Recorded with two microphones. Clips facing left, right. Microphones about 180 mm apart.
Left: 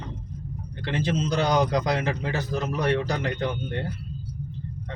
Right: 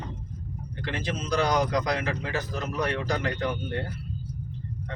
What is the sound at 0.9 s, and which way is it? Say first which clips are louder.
Speech: left 3 dB; 25° left (ahead or behind).